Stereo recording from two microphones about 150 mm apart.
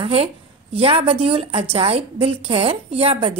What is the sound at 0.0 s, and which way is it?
A woman's voice, 45° right (ahead or behind).